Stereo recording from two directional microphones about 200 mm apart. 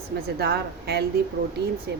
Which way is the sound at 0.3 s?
50° right (ahead or behind).